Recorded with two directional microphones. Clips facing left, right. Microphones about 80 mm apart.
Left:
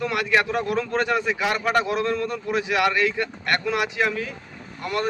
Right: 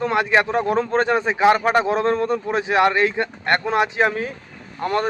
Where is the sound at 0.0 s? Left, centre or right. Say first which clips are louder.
Right 4 dB; right.